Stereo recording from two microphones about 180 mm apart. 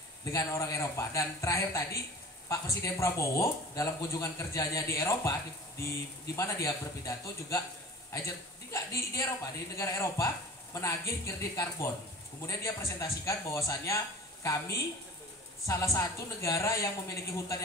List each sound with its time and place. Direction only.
0.2 s speech: 20° left (ahead or behind)